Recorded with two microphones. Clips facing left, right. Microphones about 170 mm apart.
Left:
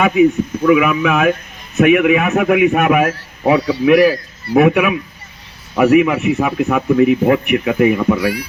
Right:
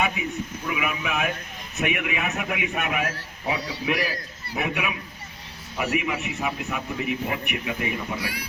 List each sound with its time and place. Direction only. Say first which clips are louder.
0.0 s a man's voice: left 15 dB; 60° left (ahead or behind)